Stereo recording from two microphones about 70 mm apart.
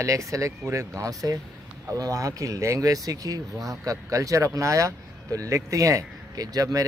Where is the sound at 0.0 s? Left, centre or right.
Right.